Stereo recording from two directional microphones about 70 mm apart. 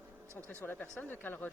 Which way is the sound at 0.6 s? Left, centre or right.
Left.